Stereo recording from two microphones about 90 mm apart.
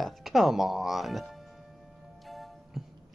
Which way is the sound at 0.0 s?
Centre (ahead or behind).